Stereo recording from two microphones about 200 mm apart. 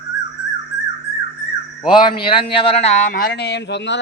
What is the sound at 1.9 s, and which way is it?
A man's voice, 25° left (ahead or behind).